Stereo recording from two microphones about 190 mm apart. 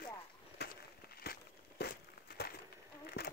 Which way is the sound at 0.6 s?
60° left (ahead or behind).